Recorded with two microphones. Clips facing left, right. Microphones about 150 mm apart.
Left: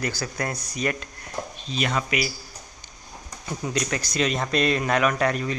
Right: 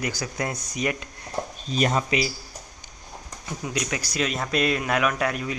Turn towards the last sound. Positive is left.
turn(degrees=-5)  # may be behind; listen again after turning